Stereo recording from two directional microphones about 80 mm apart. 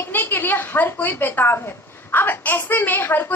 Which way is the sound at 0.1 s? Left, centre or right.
Left.